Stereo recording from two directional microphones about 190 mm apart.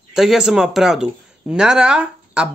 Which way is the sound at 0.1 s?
Centre (ahead or behind).